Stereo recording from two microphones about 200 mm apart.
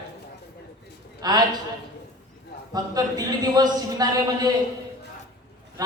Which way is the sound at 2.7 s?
20° right (ahead or behind).